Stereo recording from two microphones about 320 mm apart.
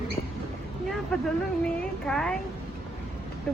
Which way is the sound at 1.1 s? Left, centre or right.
Centre.